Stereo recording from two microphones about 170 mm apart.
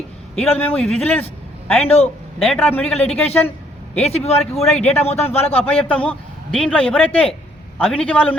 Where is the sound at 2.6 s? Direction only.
10° left (ahead or behind).